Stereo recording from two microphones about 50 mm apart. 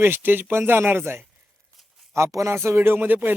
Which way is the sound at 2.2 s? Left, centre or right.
Right.